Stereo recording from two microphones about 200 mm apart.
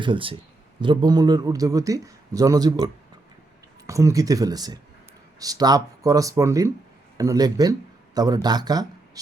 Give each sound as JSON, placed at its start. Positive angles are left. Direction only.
{"t": 0.0, "sound": "a man's voice", "side_deg": -25}